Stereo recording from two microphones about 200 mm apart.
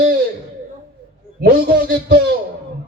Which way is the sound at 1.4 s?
50° right (ahead or behind).